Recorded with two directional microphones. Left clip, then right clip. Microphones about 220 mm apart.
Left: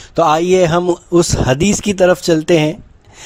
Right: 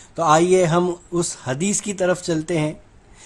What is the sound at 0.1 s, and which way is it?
Speech, 35° left (ahead or behind).